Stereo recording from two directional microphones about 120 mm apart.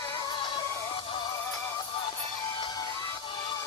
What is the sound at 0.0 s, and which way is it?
Music, 25° left (ahead or behind).